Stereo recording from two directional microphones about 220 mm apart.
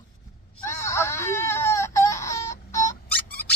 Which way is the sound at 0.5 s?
10° left (ahead or behind).